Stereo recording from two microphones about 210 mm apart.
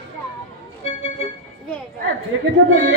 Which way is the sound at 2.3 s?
70° right (ahead or behind).